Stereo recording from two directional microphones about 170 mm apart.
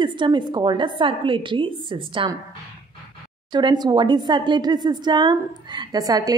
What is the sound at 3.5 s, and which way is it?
A woman's voice, 25° right (ahead or behind).